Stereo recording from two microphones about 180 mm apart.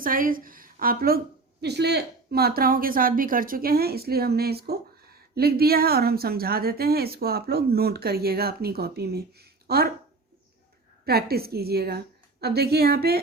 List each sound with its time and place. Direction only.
0.0 s a woman's voice: 50° right (ahead or behind)
1.6 s a woman's voice: 65° right (ahead or behind)
11.0 s a woman's voice: 60° right (ahead or behind)